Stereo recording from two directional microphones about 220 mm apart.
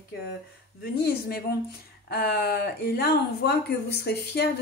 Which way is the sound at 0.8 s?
45° left (ahead or behind).